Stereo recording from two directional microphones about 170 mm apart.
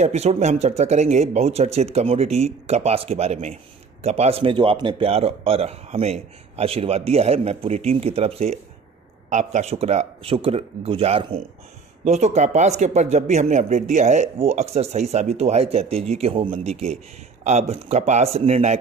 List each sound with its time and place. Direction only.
0.0 s speech: 40° right (ahead or behind)